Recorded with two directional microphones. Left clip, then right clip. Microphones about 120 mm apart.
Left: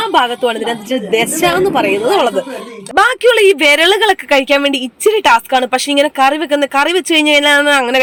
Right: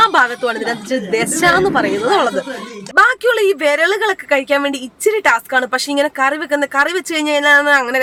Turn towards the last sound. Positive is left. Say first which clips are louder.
# left 1 dB
turn(degrees=20)  # may be behind; listen again after turning